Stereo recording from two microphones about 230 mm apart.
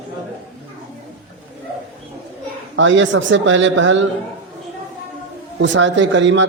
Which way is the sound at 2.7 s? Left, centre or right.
Right.